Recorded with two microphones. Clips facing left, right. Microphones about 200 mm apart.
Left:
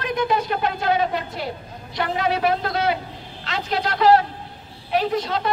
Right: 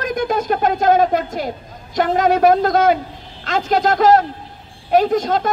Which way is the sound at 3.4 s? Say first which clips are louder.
Right 8 dB; 45° right (ahead or behind).